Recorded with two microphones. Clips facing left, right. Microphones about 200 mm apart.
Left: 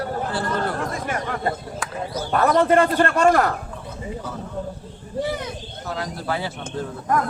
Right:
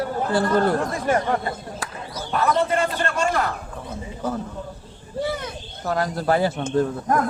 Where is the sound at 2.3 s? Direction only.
50° left (ahead or behind).